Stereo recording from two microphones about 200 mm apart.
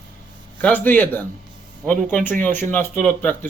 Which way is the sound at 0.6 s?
10° left (ahead or behind).